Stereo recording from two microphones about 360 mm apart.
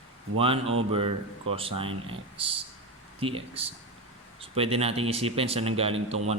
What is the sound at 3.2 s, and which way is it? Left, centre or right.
Speech, centre.